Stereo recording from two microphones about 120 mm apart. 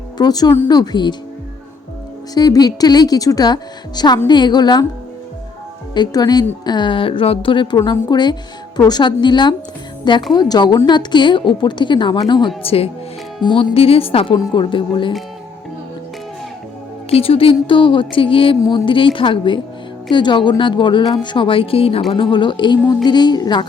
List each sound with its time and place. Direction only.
0.2 s a woman's voice: 35° left (ahead or behind)
2.3 s a woman's voice: 35° left (ahead or behind)
5.9 s a woman's voice: 35° left (ahead or behind)
17.1 s a woman's voice: 50° left (ahead or behind); by 23.6 s 35° left (ahead or behind)